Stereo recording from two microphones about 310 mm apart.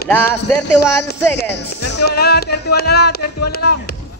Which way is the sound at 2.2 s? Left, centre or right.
Left.